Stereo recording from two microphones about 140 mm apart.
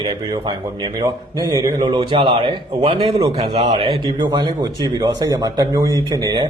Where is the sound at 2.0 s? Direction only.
40° right (ahead or behind).